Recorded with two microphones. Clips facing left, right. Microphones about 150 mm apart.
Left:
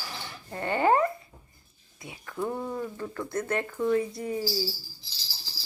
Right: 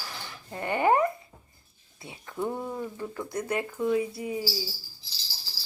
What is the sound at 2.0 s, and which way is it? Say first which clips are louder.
Speech: left 1 dB; 25° right (ahead or behind).